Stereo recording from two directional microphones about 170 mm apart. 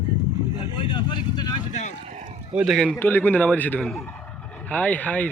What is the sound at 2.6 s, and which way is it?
Speech, 5° right (ahead or behind).